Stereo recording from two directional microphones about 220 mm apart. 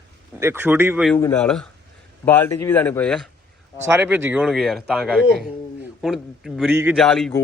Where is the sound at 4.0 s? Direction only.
10° right (ahead or behind).